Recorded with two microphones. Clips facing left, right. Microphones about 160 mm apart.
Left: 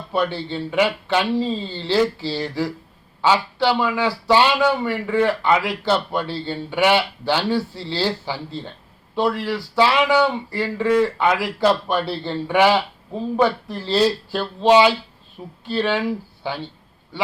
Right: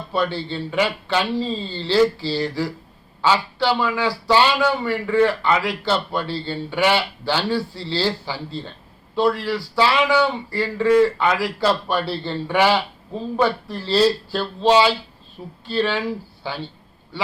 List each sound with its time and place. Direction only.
0.1 s speech: 15° left (ahead or behind)
9.4 s speech: 20° left (ahead or behind)